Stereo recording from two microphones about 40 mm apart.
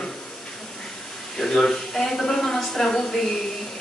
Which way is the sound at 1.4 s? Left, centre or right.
Centre.